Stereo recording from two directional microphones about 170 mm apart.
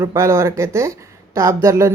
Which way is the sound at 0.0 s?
15° right (ahead or behind).